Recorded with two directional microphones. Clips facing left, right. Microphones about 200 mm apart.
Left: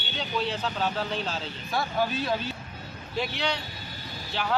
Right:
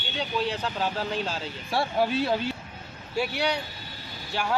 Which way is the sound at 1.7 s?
30° right (ahead or behind).